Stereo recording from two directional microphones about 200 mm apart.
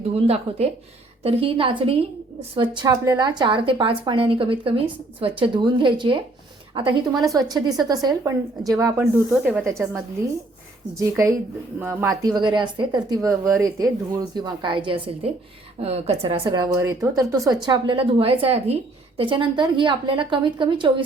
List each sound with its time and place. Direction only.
0.1 s a woman's voice: 30° right (ahead or behind); by 9.6 s 5° right (ahead or behind)
11.8 s a woman's voice: 10° right (ahead or behind); by 20.9 s 25° right (ahead or behind)